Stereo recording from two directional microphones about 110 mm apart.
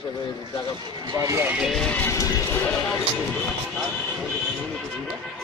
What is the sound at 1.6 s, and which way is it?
Speech, centre (ahead or behind).